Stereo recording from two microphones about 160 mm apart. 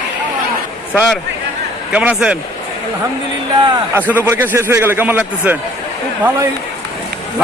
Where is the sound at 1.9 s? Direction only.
10° right (ahead or behind).